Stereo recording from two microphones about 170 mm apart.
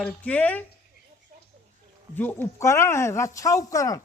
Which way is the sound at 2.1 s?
10° left (ahead or behind).